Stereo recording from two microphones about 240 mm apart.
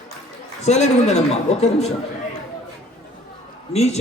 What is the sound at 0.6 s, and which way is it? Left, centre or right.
A man's voice, left.